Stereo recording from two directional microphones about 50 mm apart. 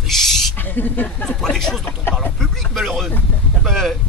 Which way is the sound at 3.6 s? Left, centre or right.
Left.